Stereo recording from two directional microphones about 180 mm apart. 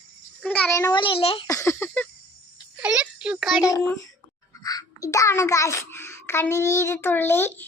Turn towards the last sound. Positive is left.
turn(degrees=10)  # may be behind; listen again after turning